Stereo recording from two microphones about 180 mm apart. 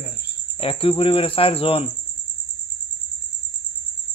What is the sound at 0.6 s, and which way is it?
A man's voice, 30° left (ahead or behind).